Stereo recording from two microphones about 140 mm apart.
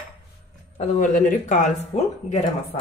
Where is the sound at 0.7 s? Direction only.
60° left (ahead or behind).